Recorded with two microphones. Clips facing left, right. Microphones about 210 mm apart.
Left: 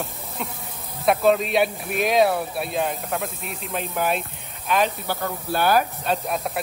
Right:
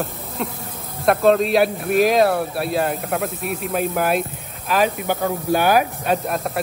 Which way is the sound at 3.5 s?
50° right (ahead or behind).